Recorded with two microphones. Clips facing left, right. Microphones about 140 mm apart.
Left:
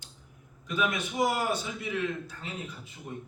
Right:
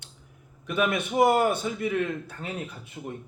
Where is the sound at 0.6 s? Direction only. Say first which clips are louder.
Right 4 dB; 60° right (ahead or behind).